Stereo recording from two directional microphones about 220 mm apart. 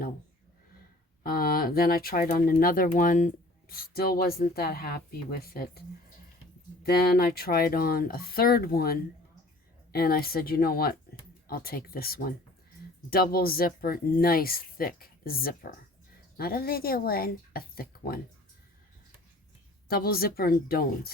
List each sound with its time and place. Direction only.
1.2 s speech: 45° left (ahead or behind)
6.8 s speech: 45° left (ahead or behind)
19.9 s speech: 45° left (ahead or behind)